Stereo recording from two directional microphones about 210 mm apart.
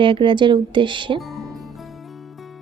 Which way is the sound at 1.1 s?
Centre (ahead or behind).